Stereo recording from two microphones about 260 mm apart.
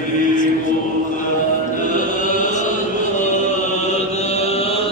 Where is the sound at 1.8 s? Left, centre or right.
Left.